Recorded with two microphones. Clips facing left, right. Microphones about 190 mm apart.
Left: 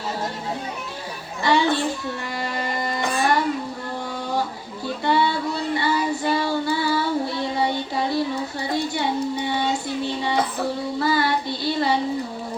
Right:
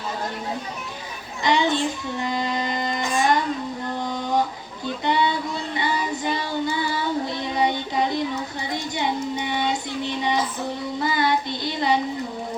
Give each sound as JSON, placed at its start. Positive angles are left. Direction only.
{"t": 1.4, "sound": "children playing", "side_deg": -20}
{"t": 1.7, "sound": "a child's voice", "side_deg": -20}
{"t": 3.2, "sound": "a sound", "side_deg": -20}
{"t": 5.0, "sound": "child singing", "side_deg": -20}